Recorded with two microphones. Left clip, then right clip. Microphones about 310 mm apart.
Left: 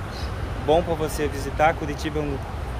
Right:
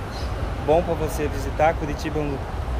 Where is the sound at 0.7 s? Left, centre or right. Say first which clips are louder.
Even; centre.